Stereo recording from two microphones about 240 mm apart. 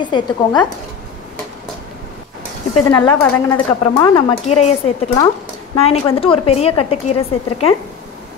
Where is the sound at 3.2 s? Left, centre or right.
Centre.